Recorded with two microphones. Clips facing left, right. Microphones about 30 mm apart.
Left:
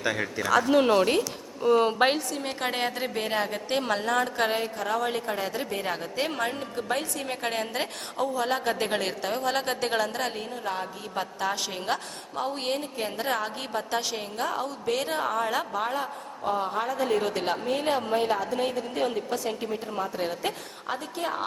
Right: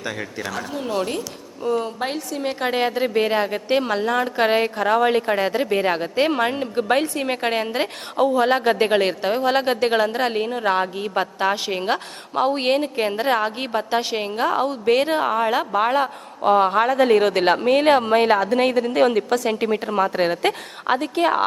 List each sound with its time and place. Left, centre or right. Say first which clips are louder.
0.0 s speech: left 1 dB; centre
2.0 s a woman's voice: left 3 dB; left
2.4 s a woman's voice: right 7 dB; centre
4.4 s a woman's voice: right 8 dB; right
4.8 s a woman's voice: right 10 dB; right
8.2 s a woman's voice: right 9 dB; right
10.3 s a woman's voice: right 11 dB; right
12.4 s a woman's voice: right 10 dB; right
15.1 s a woman's voice: right 7 dB; right
15.7 s a man's voice: right 10 dB; right